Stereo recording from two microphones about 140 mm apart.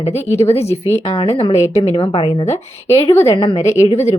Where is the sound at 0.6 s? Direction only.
15° left (ahead or behind).